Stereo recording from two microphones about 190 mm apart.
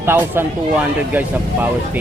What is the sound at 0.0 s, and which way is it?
Speech, 10° right (ahead or behind).